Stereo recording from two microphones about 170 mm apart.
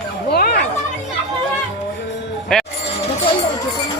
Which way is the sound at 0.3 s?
65° left (ahead or behind).